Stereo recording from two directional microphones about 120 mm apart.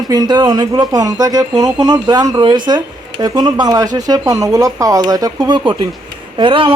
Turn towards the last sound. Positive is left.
turn(degrees=-45)  # may be behind; listen again after turning